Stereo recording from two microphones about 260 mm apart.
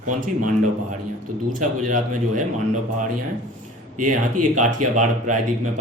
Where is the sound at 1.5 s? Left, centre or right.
Right.